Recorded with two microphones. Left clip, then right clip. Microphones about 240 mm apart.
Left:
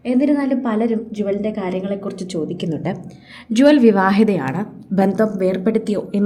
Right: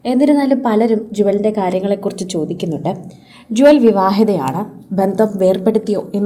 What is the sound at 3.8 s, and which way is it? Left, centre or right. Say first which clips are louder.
A woman's voice: right 2 dB; centre.